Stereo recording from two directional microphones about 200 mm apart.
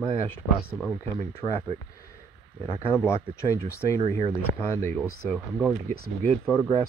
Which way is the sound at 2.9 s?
15° left (ahead or behind).